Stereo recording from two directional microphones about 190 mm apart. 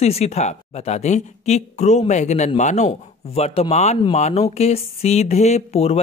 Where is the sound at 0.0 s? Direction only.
35° left (ahead or behind).